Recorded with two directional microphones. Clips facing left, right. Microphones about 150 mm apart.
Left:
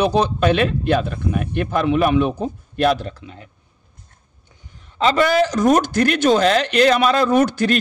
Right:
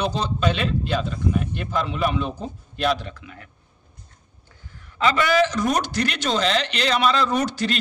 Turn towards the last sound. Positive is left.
turn(degrees=55)  # may be behind; listen again after turning